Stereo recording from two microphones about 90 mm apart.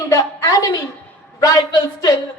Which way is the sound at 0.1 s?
40° left (ahead or behind).